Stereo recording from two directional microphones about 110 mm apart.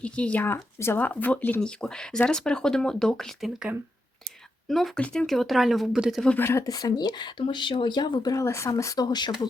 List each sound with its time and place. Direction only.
0.0 s speech: 10° left (ahead or behind)
4.7 s speech: 5° left (ahead or behind)
6.2 s speech: 20° left (ahead or behind)
6.7 s speech: 35° left (ahead or behind)